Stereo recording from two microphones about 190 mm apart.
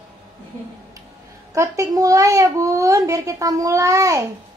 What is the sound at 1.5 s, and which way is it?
A child's voice, 15° right (ahead or behind).